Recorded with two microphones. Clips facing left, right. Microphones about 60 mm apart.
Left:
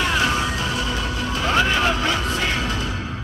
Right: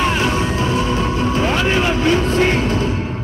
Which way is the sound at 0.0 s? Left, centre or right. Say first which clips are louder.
Right 3 dB; right.